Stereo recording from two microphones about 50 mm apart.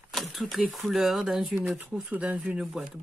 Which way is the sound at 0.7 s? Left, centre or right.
Centre.